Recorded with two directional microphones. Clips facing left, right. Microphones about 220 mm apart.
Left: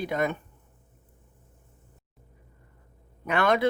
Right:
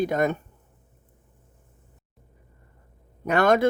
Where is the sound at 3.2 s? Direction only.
45° right (ahead or behind).